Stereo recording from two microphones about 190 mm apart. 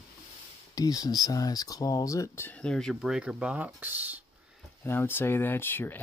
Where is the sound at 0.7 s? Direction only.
20° left (ahead or behind); by 4.0 s 10° right (ahead or behind).